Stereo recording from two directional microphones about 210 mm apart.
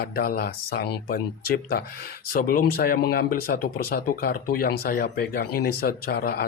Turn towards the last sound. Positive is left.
turn(degrees=45)  # may be behind; listen again after turning